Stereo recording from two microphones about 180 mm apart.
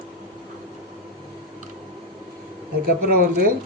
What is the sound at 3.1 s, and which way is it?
Speech, 60° right (ahead or behind).